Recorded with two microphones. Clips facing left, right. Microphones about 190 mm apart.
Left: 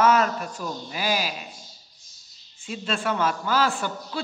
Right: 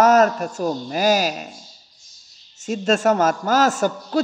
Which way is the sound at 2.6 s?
45° right (ahead or behind).